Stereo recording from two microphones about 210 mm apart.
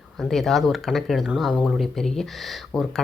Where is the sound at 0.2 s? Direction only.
Centre (ahead or behind).